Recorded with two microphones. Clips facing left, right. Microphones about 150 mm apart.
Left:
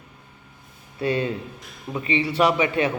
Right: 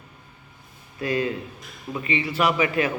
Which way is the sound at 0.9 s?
30° left (ahead or behind).